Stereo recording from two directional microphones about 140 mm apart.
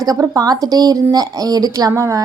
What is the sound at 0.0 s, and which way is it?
A woman's voice, 25° right (ahead or behind).